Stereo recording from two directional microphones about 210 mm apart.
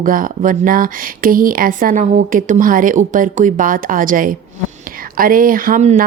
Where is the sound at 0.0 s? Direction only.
40° right (ahead or behind).